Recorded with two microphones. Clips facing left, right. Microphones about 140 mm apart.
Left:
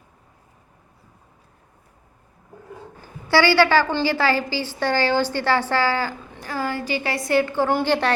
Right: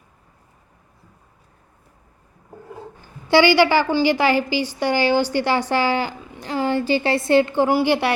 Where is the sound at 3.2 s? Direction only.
20° right (ahead or behind).